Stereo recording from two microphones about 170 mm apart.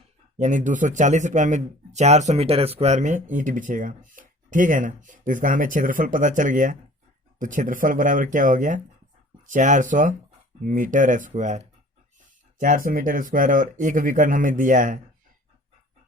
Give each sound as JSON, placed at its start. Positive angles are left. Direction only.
{"t": 0.3, "sound": "speech", "side_deg": -45}